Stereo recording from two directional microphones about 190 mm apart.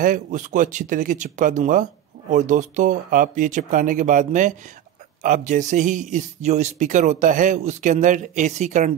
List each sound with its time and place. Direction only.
0.0 s speech: 45° right (ahead or behind)